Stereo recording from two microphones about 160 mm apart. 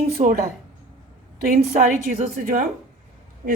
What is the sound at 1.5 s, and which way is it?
A woman's voice, 50° right (ahead or behind).